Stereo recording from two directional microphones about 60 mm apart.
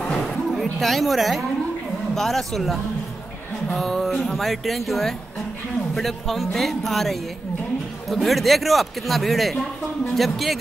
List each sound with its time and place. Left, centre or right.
0.5 s a woman's voice: centre